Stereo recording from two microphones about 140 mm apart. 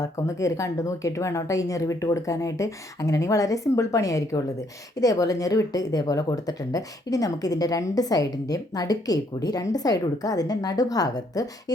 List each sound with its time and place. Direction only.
0.0 s a woman's voice: 20° left (ahead or behind)